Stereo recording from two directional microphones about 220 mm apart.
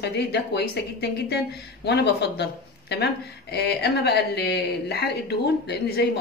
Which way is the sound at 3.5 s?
50° left (ahead or behind).